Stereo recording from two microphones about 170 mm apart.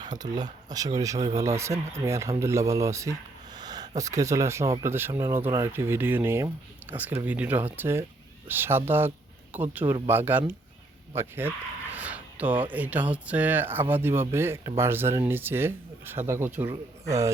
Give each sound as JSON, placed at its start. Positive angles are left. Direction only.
{"t": 0.2, "sound": "speech", "side_deg": -25}
{"t": 11.1, "sound": "a sound", "side_deg": -15}
{"t": 12.7, "sound": "speech", "side_deg": -10}